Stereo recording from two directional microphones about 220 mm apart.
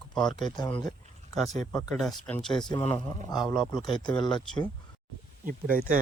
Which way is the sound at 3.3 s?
Centre (ahead or behind).